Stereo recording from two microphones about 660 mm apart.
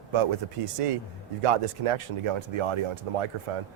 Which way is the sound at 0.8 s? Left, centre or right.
Right.